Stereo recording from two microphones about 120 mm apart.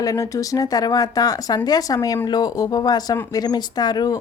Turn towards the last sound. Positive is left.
turn(degrees=35)  # may be behind; listen again after turning